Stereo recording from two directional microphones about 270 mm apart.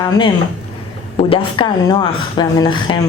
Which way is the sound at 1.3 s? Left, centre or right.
Centre.